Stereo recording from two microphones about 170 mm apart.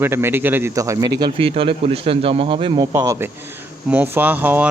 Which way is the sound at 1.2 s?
30° right (ahead or behind).